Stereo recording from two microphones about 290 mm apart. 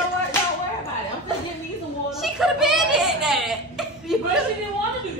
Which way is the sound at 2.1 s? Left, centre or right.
Centre.